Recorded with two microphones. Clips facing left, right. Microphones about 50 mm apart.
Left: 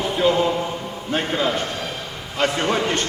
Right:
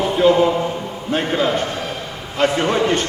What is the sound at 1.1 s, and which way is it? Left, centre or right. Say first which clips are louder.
A man's voice: right 3 dB; centre.